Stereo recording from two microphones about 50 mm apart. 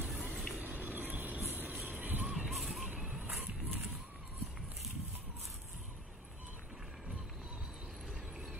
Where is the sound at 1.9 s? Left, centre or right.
Right.